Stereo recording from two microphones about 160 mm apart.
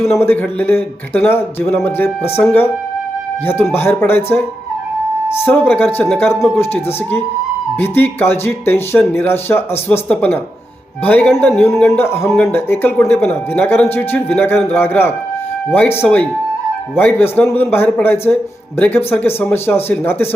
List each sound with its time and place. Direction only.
0.0 s speech: 15° left (ahead or behind)
5.5 s speech: 10° left (ahead or behind)